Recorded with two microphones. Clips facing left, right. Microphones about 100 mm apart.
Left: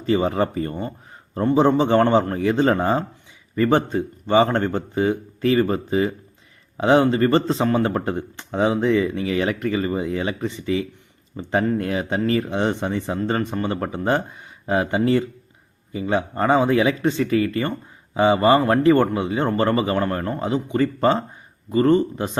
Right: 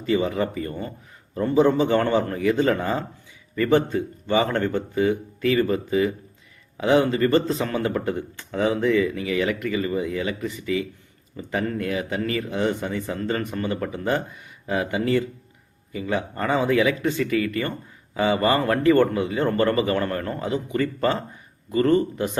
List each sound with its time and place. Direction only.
0.0 s speech: 35° left (ahead or behind)